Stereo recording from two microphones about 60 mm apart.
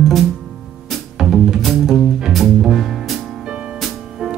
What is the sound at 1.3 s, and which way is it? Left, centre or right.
Music, centre.